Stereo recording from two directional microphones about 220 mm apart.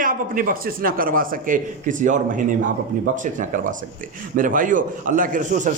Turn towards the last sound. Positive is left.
turn(degrees=-35)  # may be behind; listen again after turning